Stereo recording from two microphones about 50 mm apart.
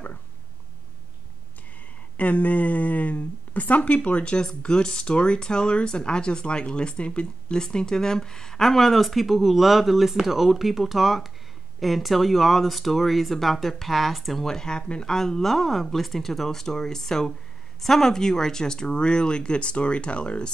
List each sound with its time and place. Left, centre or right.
2.1 s speech: left; by 14.4 s centre
14.4 s speech: centre